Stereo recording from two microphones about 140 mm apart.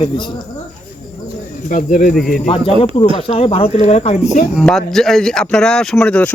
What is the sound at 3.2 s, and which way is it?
Speech, 40° left (ahead or behind).